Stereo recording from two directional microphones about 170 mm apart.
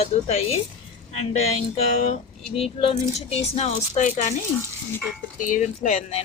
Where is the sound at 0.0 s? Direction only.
40° left (ahead or behind).